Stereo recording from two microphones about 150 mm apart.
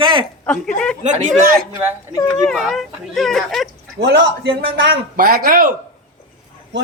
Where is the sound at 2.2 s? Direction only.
20° left (ahead or behind).